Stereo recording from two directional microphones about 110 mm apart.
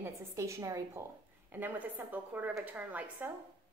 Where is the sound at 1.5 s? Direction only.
15° right (ahead or behind).